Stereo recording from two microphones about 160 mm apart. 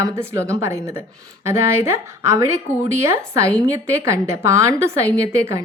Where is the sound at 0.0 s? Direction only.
15° right (ahead or behind).